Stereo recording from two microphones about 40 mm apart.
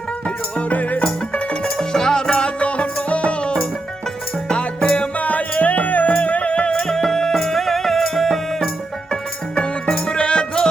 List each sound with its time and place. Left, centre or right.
0.7 s music: left
1.3 s music: centre
2.6 s music: left
6.8 s music: centre
9.6 s music: left